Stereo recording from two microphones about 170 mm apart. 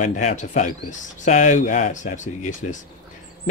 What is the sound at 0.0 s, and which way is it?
Speech, 45° left (ahead or behind).